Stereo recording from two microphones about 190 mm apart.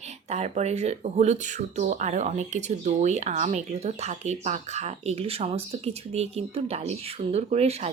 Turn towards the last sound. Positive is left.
turn(degrees=-35)  # may be behind; listen again after turning